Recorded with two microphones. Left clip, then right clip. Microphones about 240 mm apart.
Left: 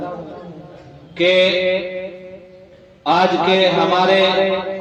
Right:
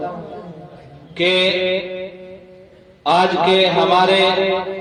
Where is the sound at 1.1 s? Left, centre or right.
Right.